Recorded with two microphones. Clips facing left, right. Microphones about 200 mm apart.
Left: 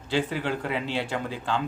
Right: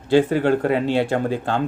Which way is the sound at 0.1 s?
50° right (ahead or behind).